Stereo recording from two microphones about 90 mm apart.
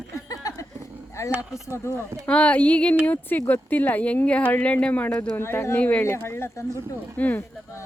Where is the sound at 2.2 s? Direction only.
15° left (ahead or behind).